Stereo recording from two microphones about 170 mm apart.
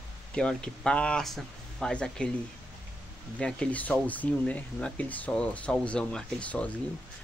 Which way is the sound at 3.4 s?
5° left (ahead or behind).